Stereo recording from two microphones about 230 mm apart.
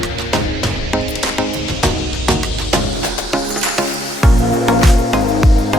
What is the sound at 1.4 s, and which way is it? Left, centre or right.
Music, centre.